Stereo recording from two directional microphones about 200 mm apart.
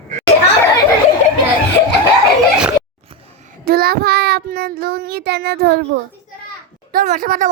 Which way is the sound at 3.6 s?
50° right (ahead or behind).